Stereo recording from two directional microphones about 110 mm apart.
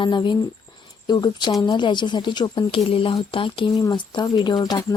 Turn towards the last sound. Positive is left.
turn(degrees=40)  # may be behind; listen again after turning